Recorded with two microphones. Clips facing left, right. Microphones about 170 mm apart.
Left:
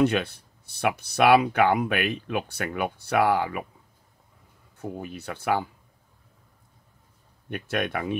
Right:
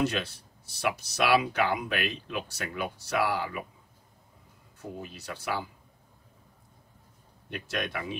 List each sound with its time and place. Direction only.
0.0 s speech: 60° left (ahead or behind)
4.7 s speech: 55° left (ahead or behind)
7.4 s speech: 55° left (ahead or behind)